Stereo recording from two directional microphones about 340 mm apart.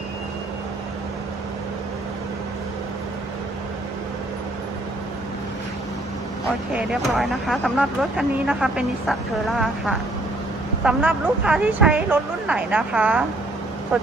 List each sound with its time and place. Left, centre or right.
6.7 s speech: centre